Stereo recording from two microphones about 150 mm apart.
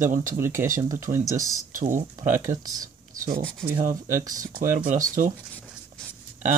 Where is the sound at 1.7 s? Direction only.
60° right (ahead or behind).